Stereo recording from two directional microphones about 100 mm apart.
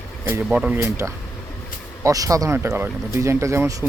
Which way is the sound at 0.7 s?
30° right (ahead or behind).